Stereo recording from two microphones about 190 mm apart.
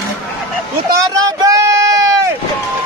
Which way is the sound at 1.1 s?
20° right (ahead or behind).